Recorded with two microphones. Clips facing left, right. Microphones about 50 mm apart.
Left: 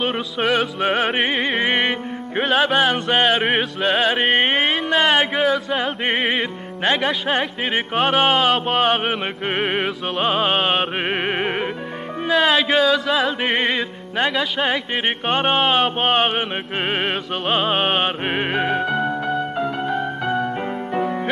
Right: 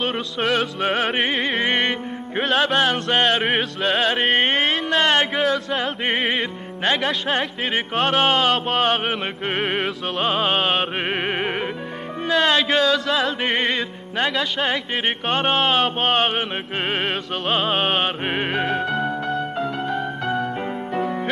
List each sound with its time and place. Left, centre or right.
0.0 s music: centre